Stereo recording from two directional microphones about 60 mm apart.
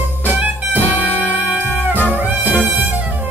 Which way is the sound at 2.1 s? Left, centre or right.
Right.